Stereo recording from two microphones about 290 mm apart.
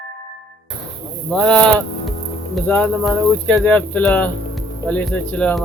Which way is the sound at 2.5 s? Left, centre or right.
Centre.